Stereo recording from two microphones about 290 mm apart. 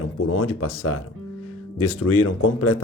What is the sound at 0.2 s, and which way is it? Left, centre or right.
Speech, left.